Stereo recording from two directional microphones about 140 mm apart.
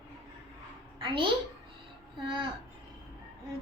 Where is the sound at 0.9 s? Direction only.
35° right (ahead or behind).